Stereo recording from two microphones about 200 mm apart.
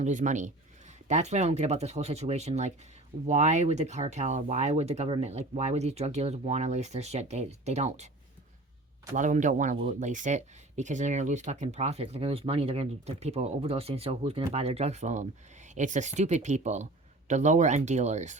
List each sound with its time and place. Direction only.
0.0 s speech: 40° right (ahead or behind)
9.1 s speech: 40° right (ahead or behind)